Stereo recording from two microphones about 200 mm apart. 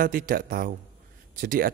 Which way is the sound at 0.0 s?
45° right (ahead or behind).